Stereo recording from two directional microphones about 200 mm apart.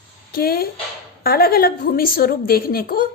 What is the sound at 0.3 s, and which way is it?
A woman's voice, 50° left (ahead or behind).